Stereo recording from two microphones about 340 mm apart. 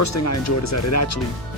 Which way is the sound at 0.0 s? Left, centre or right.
Left.